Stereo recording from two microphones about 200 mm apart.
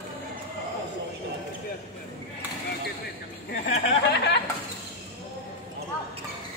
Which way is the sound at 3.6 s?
55° left (ahead or behind).